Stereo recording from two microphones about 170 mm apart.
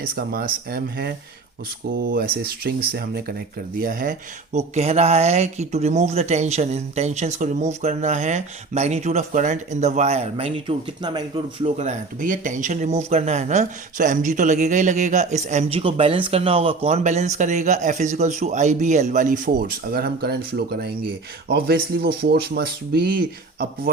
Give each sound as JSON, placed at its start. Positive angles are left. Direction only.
{"t": 0.0, "sound": "speech", "side_deg": -60}
{"t": 11.6, "sound": "speech", "side_deg": -40}